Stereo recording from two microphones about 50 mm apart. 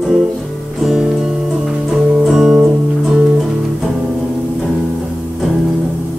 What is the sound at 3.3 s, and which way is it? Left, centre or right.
Music, centre.